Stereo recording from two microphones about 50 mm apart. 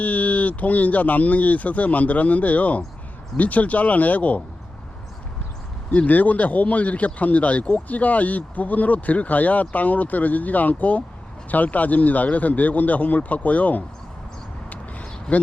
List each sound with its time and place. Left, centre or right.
0.0 s speech: left
5.9 s speech: left
14.7 s a sound: left